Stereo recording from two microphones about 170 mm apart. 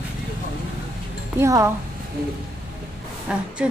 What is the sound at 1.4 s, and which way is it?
Speech, 20° right (ahead or behind).